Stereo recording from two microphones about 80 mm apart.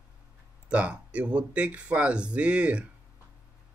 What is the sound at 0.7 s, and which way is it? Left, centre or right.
Speech, centre.